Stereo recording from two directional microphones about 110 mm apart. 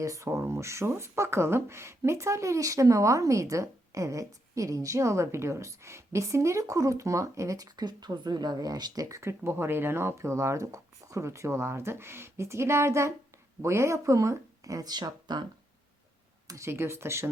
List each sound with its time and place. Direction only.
0.0 s speech: 30° right (ahead or behind)
16.5 s speech: 25° right (ahead or behind)